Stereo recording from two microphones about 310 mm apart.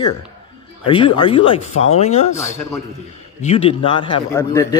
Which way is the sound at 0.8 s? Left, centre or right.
Centre.